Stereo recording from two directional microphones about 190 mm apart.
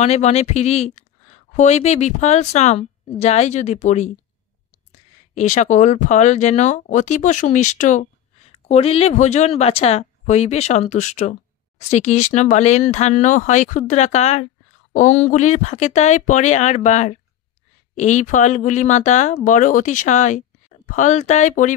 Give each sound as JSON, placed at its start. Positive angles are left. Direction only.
{"t": 0.0, "sound": "speech", "side_deg": 35}
{"t": 5.3, "sound": "speech", "side_deg": 40}